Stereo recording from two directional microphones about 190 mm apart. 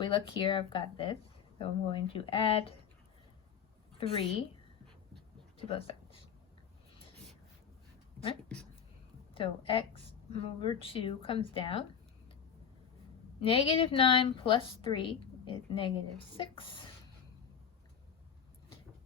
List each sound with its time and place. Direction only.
0.0 s a woman's voice: 25° left (ahead or behind)
4.0 s a woman's voice: 30° left (ahead or behind)
5.5 s a sound: 30° left (ahead or behind)
9.3 s a woman's voice: 25° left (ahead or behind)
13.4 s a woman's voice: 30° left (ahead or behind)